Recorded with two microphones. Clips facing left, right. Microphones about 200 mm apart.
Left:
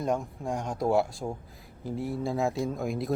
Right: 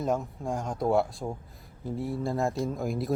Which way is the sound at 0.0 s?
5° right (ahead or behind).